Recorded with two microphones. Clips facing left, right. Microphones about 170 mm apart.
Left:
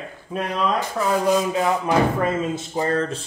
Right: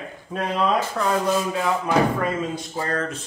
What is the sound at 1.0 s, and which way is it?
A man's voice, 15° left (ahead or behind).